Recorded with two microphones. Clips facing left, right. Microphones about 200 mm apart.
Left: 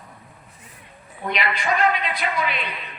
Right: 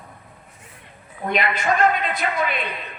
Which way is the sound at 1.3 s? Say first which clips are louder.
Right 2 dB; 50° right (ahead or behind).